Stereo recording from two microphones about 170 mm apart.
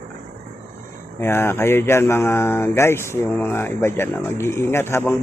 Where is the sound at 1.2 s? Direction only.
15° left (ahead or behind).